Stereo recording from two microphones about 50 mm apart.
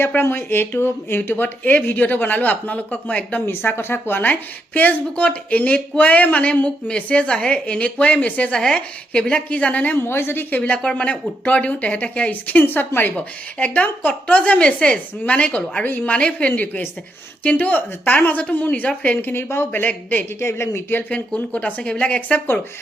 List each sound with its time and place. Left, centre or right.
0.2 s speech: left
1.3 s a woman's voice: left
3.4 s a woman's voice: left
9.9 s speech: left
10.5 s a woman's voice: left
12.3 s a woman's voice: left
13.6 s a woman's voice: left
14.6 s a woman's voice: left
15.8 s a woman's voice: left
19.2 s speech: left
19.7 s a woman's voice: left
20.4 s speech: left
21.1 s a woman's voice: left